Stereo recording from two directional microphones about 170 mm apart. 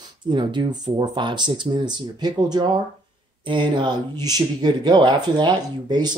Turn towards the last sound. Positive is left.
turn(degrees=-25)  # may be behind; listen again after turning